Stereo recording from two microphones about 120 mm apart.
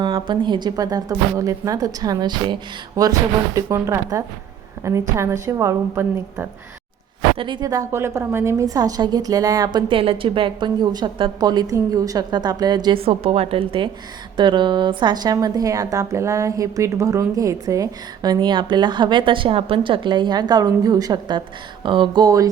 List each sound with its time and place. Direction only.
0.0 s a woman's voice: 40° right (ahead or behind); by 6.5 s 25° right (ahead or behind)
7.3 s a woman's voice: 40° right (ahead or behind)
9.9 s a woman's voice: 50° right (ahead or behind)
13.0 s a woman's voice: 55° right (ahead or behind); by 22.4 s 30° right (ahead or behind)